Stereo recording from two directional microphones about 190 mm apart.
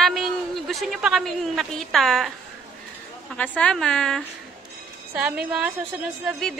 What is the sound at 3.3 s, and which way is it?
A man's voice, 5° left (ahead or behind).